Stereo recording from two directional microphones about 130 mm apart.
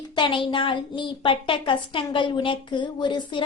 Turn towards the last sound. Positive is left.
turn(degrees=35)  # may be behind; listen again after turning